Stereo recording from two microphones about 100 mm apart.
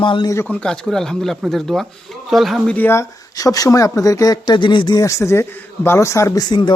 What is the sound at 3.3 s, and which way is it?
Speech, 35° left (ahead or behind).